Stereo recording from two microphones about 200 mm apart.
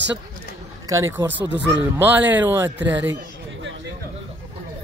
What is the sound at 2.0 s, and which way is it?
A man's voice, 10° right (ahead or behind).